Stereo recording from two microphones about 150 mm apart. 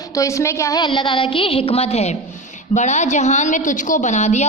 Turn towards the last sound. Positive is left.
turn(degrees=50)  # may be behind; listen again after turning